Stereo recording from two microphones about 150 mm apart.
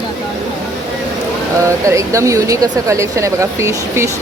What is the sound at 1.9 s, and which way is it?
Speech, 20° right (ahead or behind).